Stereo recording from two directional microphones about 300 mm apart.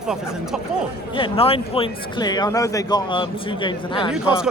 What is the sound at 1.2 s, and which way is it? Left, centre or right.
Speech, centre.